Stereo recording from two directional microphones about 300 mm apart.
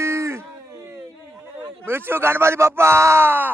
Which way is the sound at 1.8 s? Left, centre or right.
Centre.